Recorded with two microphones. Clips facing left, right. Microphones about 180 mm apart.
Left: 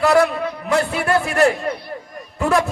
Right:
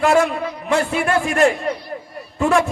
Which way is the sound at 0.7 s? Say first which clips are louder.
Even; 35° left (ahead or behind).